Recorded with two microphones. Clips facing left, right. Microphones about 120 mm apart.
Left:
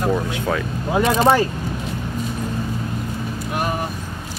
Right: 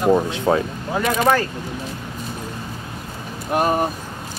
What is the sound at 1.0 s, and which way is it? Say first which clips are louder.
Speech: left 2 dB; 30° left (ahead or behind).